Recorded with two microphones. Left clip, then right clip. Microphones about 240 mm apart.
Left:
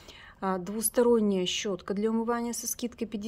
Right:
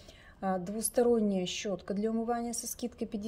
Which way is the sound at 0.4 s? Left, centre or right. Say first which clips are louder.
Left 2 dB; centre.